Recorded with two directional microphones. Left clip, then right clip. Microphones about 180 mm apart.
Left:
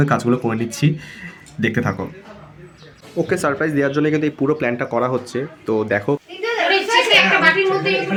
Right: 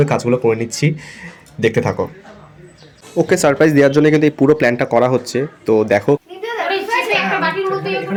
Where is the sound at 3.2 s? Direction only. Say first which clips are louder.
Right 6 dB; 20° right (ahead or behind).